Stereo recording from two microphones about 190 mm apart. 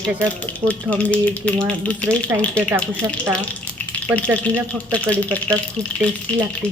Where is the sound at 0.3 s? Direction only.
10° left (ahead or behind).